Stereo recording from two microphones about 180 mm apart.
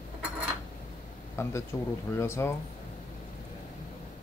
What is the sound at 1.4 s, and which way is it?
Speech, 15° left (ahead or behind).